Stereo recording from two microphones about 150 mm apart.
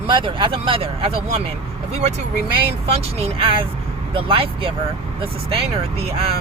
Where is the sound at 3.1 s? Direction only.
40° right (ahead or behind).